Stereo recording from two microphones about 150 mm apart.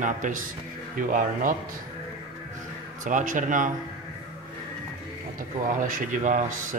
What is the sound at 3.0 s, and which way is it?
Speech, 60° right (ahead or behind).